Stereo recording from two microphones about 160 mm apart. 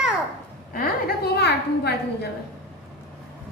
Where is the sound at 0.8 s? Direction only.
80° left.